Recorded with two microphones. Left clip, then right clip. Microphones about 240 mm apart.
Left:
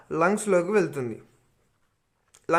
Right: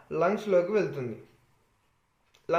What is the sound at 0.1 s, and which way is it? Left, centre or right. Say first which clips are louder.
Speech: left 3 dB; left.